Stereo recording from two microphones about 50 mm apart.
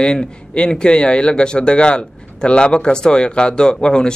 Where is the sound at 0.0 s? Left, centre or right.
Centre.